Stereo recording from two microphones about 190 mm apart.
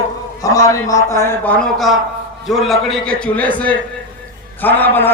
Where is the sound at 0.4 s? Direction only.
15° left (ahead or behind).